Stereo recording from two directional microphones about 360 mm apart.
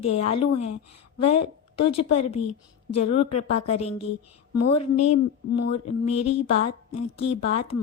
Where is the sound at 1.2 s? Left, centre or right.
Centre.